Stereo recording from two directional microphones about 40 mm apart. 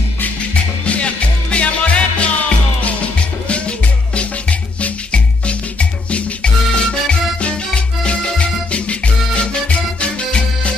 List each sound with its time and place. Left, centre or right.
0.8 s music: left
3.4 s music: left